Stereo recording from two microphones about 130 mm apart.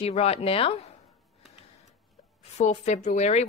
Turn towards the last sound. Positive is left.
turn(degrees=60)  # may be behind; listen again after turning